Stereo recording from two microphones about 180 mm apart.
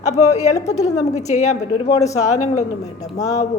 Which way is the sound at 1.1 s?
40° left (ahead or behind).